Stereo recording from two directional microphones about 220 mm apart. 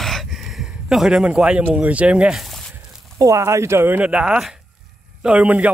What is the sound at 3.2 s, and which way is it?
Speech, 15° right (ahead or behind).